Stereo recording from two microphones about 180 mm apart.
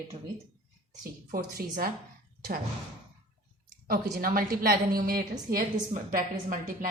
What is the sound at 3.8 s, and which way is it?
A woman's voice, 55° right (ahead or behind).